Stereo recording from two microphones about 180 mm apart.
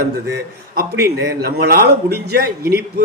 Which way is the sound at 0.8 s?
60° right (ahead or behind).